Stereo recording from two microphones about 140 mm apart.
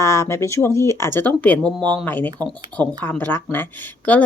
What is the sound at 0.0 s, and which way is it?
A woman's voice, 20° left (ahead or behind).